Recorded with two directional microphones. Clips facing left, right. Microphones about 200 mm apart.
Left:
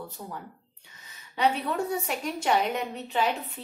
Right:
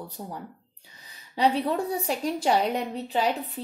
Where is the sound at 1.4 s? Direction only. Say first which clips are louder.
Right 2 dB; 35° right (ahead or behind).